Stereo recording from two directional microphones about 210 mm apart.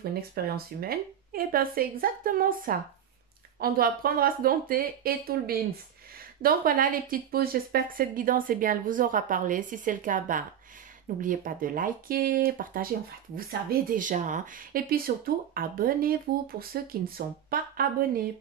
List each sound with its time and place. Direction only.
0.1 s speech: 45° right (ahead or behind)